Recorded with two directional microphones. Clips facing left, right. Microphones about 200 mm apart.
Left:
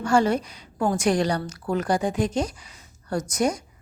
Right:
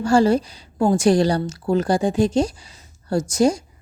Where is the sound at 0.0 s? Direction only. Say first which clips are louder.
Right 5 dB; 30° right (ahead or behind).